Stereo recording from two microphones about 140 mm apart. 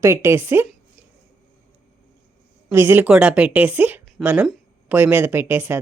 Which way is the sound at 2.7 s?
15° right (ahead or behind).